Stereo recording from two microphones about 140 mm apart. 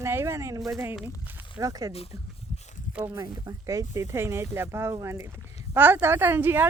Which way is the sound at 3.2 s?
25° right (ahead or behind).